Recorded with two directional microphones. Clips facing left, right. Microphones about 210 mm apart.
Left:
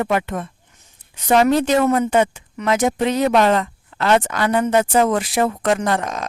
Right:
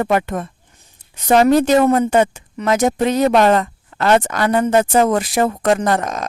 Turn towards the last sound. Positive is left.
turn(degrees=-45)  # may be behind; listen again after turning